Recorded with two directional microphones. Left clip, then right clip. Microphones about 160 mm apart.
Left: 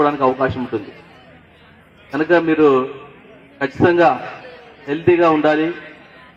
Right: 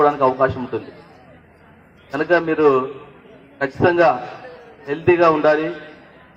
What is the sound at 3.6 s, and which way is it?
A man's voice, 65° left (ahead or behind).